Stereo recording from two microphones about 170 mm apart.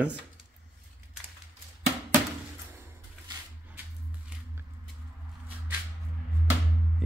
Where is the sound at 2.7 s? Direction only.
15° right (ahead or behind).